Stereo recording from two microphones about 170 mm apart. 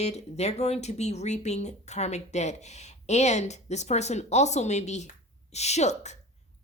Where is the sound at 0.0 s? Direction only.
40° left (ahead or behind).